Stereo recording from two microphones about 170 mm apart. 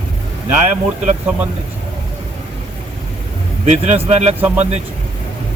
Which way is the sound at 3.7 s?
40° right (ahead or behind).